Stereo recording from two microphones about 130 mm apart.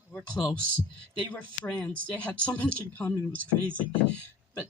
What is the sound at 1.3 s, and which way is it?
Speech, 10° left (ahead or behind).